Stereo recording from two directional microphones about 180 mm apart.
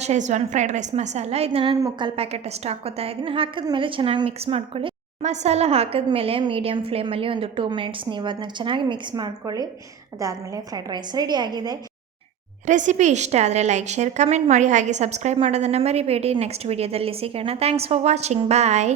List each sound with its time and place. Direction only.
0.0 s a woman's voice: 40° right (ahead or behind)
1.7 s a woman's voice: 25° right (ahead or behind)
12.6 s a woman's voice: 45° right (ahead or behind)